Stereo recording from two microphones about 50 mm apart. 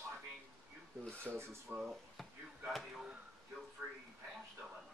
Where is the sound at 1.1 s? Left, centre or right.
Right.